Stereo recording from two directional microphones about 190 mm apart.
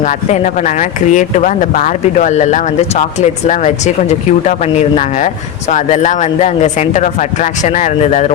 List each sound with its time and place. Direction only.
0.0 s speech: 40° left (ahead or behind)